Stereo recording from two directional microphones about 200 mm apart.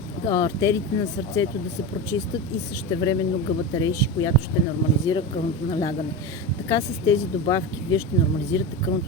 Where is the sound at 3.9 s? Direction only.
15° left (ahead or behind).